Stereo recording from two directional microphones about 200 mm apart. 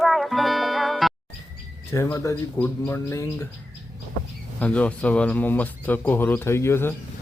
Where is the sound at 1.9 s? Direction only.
15° left (ahead or behind).